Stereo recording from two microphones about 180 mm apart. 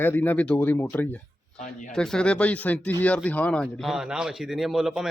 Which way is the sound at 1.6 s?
45° left (ahead or behind).